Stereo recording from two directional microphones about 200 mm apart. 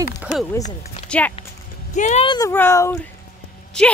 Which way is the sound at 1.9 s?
35° left (ahead or behind).